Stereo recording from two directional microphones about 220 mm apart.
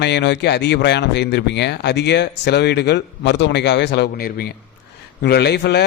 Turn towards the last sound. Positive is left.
turn(degrees=50)  # may be behind; listen again after turning